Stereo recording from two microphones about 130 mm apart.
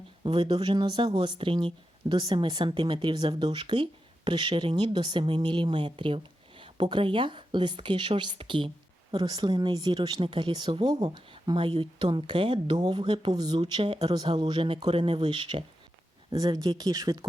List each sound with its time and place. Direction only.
0.2 s speech: 40° right (ahead or behind)